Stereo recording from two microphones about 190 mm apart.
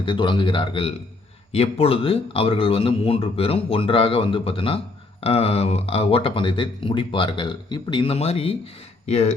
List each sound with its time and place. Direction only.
0.0 s speech: 25° left (ahead or behind)